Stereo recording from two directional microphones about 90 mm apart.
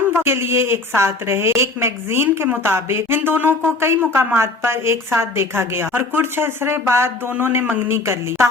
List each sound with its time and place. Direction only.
0.1 s a woman's voice: 25° right (ahead or behind)